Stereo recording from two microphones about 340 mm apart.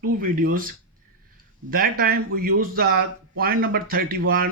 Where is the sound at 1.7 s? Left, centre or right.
Right.